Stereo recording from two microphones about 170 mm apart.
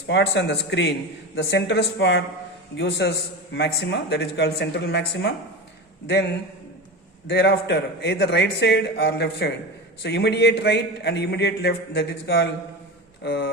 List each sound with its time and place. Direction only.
0.1 s a man's voice: 90° left
7.3 s a man's voice: 80° left